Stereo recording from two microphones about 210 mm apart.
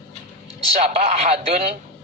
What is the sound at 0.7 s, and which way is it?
Speech, 30° right (ahead or behind).